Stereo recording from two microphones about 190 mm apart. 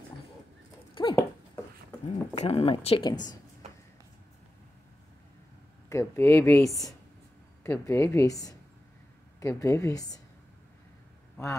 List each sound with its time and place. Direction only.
1.0 s dog: 25° left (ahead or behind)
2.0 s speech: 35° left (ahead or behind)
5.9 s a woman's voice: 15° left (ahead or behind)